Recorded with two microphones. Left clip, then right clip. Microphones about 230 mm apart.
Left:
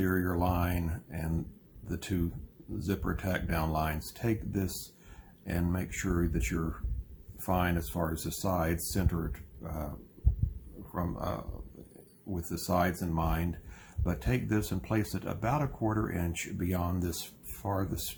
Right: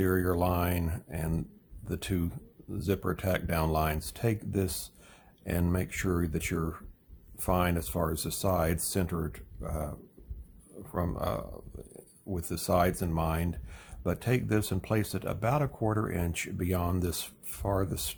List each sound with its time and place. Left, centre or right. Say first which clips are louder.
0.0 s speech: right 3 dB; right
10.9 s speech: right 3 dB; right